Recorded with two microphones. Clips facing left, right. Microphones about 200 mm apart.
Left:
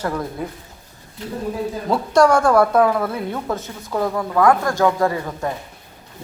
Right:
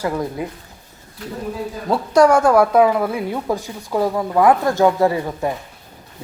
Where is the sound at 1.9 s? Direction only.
10° right (ahead or behind).